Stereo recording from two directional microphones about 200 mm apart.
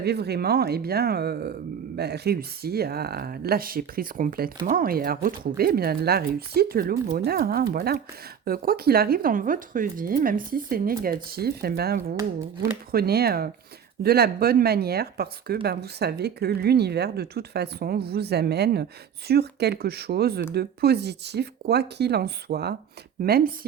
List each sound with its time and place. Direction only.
0.0 s speech: 55° right (ahead or behind)